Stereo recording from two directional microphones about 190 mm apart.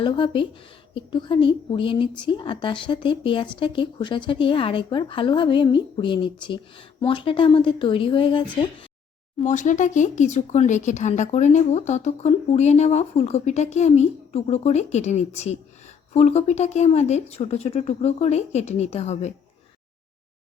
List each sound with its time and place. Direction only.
0.0 s a woman's voice: 25° left (ahead or behind)
9.4 s speech: 40° left (ahead or behind)